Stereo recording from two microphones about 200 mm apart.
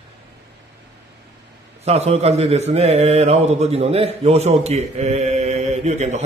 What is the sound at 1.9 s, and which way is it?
Speech, 30° right (ahead or behind).